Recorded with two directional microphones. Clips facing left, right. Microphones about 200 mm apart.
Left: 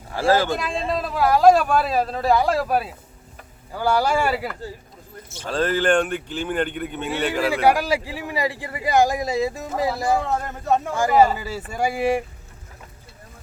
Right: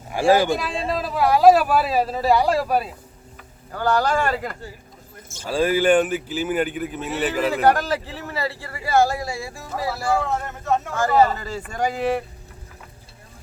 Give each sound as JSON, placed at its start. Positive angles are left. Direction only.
{"t": 0.1, "sound": "speech", "side_deg": -15}
{"t": 0.5, "sound": "speech", "side_deg": 0}
{"t": 5.5, "sound": "speech", "side_deg": -10}
{"t": 7.5, "sound": "speech", "side_deg": 10}